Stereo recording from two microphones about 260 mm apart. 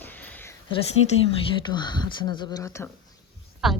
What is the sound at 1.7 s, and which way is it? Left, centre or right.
Speech, centre.